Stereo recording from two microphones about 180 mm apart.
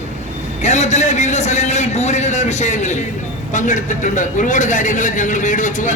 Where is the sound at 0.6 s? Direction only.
40° left (ahead or behind).